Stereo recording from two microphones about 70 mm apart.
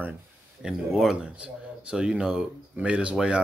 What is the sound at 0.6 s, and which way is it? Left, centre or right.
Speech, centre.